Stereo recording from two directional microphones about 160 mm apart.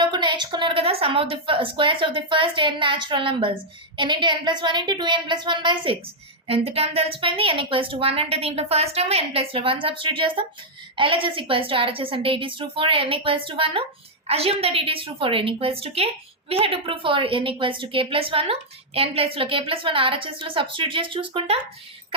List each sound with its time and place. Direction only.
0.0 s a woman's voice: 30° right (ahead or behind)